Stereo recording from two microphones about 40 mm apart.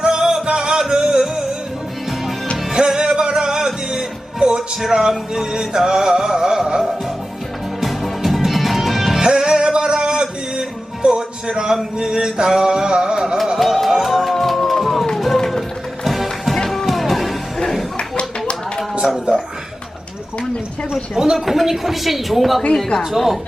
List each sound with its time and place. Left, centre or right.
0.0 s music: centre
2.7 s music: centre
7.8 s music: centre
9.2 s music: centre
13.6 s music: centre
17.9 s a sound: left
20.9 s speech: centre
21.3 s a woman's voice: centre